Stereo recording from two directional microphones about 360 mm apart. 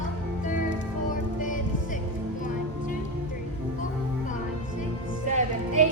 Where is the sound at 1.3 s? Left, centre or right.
Left.